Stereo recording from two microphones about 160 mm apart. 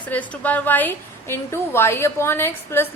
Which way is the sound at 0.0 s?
10° left (ahead or behind).